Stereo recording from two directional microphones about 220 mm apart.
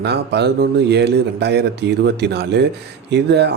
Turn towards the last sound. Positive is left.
turn(degrees=-50)  # may be behind; listen again after turning